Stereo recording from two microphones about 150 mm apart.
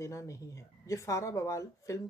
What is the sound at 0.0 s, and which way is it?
Speech, 20° left (ahead or behind).